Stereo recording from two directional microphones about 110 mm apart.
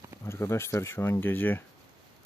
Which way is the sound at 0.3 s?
25° left (ahead or behind).